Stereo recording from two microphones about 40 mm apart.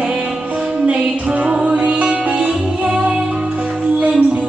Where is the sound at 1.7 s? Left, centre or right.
Right.